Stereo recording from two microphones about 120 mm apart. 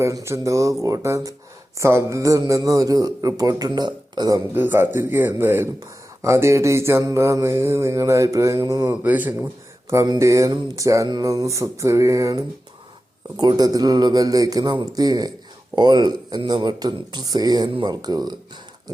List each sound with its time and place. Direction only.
0.0 s speech: 25° right (ahead or behind)
4.4 s speech: 15° right (ahead or behind)
8.9 s speech: 15° right (ahead or behind); by 18.3 s 35° right (ahead or behind)